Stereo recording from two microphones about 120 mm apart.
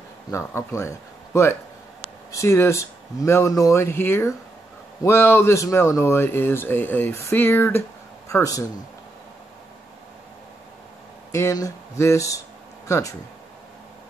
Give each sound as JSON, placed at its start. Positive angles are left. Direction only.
{"t": 0.3, "sound": "speech", "side_deg": 25}
{"t": 11.3, "sound": "speech", "side_deg": 25}